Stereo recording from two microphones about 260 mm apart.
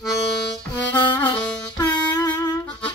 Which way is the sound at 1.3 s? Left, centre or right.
Centre.